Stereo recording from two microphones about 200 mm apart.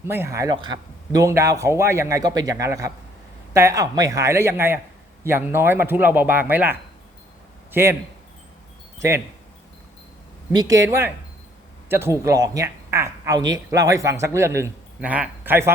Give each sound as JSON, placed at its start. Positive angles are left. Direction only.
{"t": 0.0, "sound": "speech", "side_deg": -10}
{"t": 9.0, "sound": "speech", "side_deg": -15}
{"t": 10.5, "sound": "speech", "side_deg": -20}